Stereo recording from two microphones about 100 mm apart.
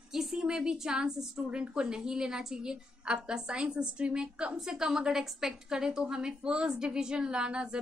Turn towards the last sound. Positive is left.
turn(degrees=-10)  # may be behind; listen again after turning